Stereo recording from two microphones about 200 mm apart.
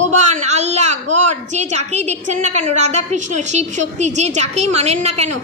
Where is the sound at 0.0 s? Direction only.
35° right (ahead or behind).